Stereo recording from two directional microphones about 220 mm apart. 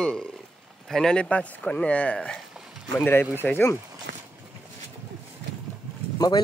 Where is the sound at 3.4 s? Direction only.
10° left (ahead or behind).